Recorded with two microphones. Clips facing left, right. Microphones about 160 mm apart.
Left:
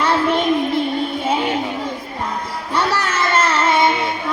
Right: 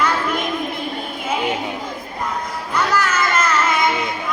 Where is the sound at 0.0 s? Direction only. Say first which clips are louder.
Left 4 dB; 30° left (ahead or behind).